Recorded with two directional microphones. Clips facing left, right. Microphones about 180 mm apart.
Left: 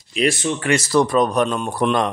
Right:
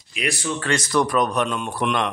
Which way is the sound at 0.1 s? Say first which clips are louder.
Left 6 dB; 30° left (ahead or behind).